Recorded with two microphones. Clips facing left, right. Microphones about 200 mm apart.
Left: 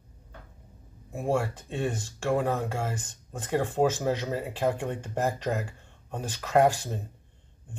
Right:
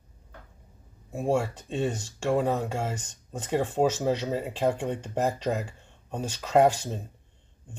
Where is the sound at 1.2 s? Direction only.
20° right (ahead or behind).